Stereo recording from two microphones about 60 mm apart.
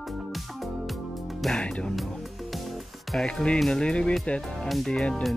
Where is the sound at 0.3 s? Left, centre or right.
Centre.